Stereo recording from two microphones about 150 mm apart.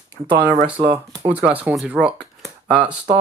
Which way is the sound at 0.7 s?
30° right (ahead or behind).